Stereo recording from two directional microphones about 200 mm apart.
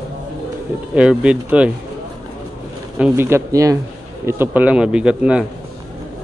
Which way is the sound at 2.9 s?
10° right (ahead or behind).